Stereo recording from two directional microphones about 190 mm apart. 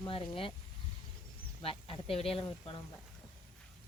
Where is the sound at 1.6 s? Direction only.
30° left (ahead or behind).